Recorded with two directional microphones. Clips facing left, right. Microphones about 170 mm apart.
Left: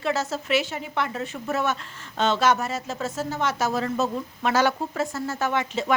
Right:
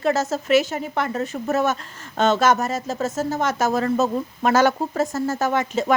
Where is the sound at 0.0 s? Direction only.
45° right (ahead or behind).